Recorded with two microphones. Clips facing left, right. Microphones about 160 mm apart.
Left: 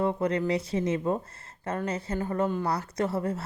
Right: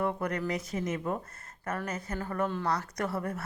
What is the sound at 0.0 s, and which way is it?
A woman's voice, 25° left (ahead or behind).